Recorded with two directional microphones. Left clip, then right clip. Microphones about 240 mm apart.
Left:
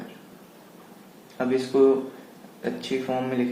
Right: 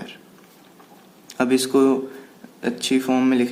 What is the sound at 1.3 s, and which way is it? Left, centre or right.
Speech, right.